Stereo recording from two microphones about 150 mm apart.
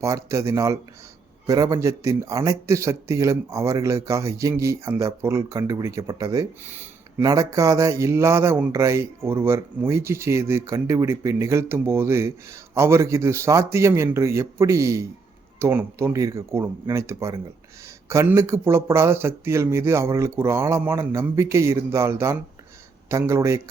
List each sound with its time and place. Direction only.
0.0 s speech: 20° right (ahead or behind)